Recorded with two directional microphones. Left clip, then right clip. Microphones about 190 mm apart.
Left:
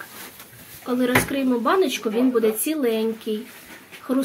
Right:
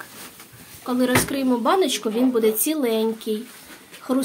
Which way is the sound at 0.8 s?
15° right (ahead or behind).